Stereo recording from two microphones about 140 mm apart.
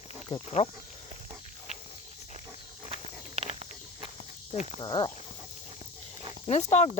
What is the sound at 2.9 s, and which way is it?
Walk, 45° right (ahead or behind).